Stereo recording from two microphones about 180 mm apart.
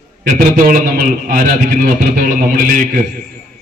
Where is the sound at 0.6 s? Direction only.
50° right (ahead or behind).